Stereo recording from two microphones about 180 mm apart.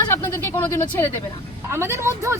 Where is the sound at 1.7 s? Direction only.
15° right (ahead or behind).